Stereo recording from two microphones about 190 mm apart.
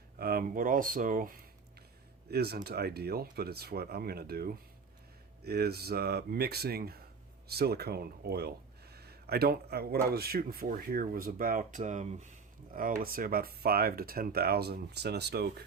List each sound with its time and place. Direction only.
0.2 s speech: 50° right (ahead or behind)